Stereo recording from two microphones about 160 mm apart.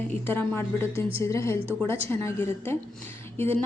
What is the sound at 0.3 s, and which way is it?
Speech, 15° left (ahead or behind).